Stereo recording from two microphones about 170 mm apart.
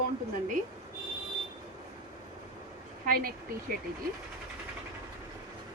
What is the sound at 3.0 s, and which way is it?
Speech, 60° right (ahead or behind).